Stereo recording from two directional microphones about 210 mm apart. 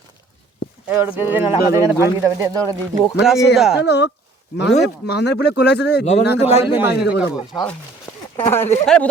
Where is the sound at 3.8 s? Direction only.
55° left (ahead or behind).